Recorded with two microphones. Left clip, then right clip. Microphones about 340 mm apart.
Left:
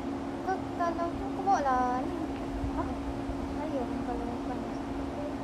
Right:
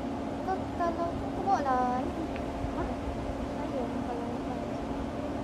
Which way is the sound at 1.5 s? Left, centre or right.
Centre.